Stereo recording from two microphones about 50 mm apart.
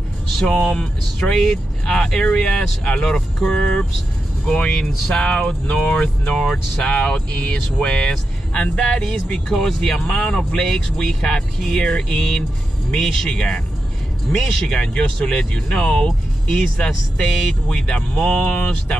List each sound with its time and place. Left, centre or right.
0.5 s speech: centre
1.3 s speech: centre
3.4 s speech: left
4.5 s speech: centre
4.7 s speech: centre
5.1 s speech: centre
10.0 s speech: left